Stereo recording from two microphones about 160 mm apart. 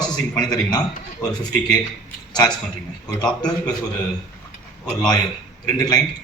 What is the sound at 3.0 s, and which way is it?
Speech, 5° left (ahead or behind).